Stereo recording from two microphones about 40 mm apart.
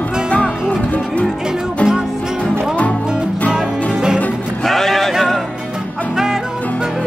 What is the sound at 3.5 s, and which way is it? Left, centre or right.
Music, centre.